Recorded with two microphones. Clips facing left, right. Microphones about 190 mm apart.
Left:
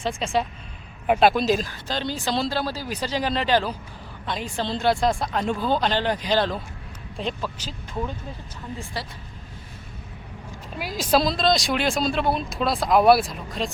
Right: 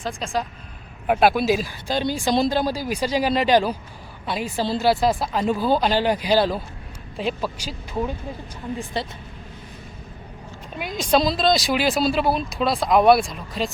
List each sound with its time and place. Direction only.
0.0 s speech: centre (ahead or behind)
8.8 s speech: 20° right (ahead or behind)
10.8 s speech: 5° left (ahead or behind)